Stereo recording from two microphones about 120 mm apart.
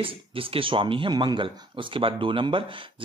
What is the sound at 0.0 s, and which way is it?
Speech, 50° right (ahead or behind).